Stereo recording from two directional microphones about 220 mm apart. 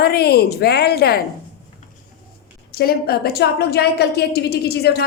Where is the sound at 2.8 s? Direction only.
45° left (ahead or behind).